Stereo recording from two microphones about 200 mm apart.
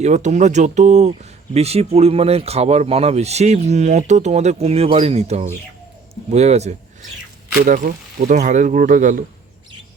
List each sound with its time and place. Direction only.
0.0 s speech: 35° right (ahead or behind)